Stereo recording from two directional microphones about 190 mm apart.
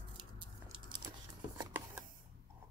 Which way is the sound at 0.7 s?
25° right (ahead or behind).